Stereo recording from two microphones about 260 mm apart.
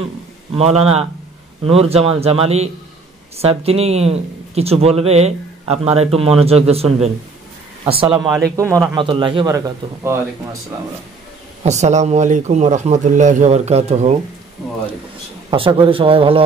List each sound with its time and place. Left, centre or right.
0.6 s a man's voice: right
11.6 s speech: right
15.5 s speech: centre